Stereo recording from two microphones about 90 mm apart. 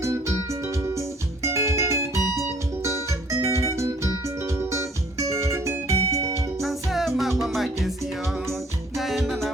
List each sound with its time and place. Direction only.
0.0 s music: 35° right (ahead or behind)
6.6 s music: centre (ahead or behind)
9.0 s music: centre (ahead or behind)